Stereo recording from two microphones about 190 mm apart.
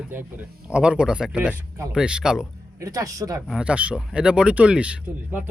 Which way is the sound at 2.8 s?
20° right (ahead or behind).